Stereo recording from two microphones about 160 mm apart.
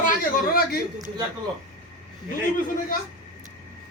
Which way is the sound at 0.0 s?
60° left (ahead or behind).